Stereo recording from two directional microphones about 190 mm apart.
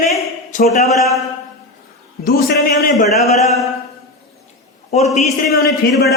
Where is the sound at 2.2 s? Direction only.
50° left (ahead or behind).